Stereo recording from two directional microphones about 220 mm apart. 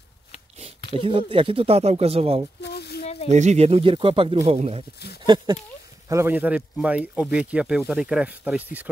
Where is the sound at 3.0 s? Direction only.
30° left (ahead or behind).